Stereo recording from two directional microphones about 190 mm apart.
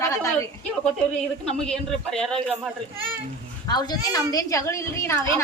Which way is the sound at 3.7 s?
20° left (ahead or behind).